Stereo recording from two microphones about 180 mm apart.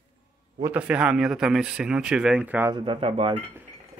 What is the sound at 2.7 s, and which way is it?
Speech, 30° right (ahead or behind).